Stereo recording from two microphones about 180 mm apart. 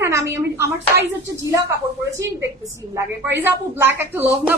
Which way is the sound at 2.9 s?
10° right (ahead or behind).